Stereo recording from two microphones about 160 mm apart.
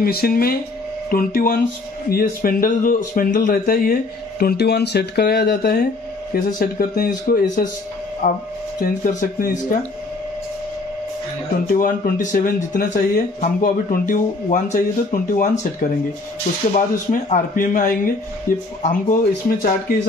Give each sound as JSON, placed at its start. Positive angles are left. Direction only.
{"t": 0.0, "sound": "a man's voice", "side_deg": 70}
{"t": 6.3, "sound": "a man's voice", "side_deg": 70}
{"t": 8.2, "sound": "speech", "side_deg": 50}
{"t": 11.7, "sound": "speech", "side_deg": 60}
{"t": 18.8, "sound": "speech", "side_deg": 50}
{"t": 19.9, "sound": "a man's voice", "side_deg": 70}